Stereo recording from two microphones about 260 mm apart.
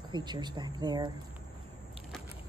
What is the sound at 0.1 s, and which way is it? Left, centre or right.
A woman's voice, centre.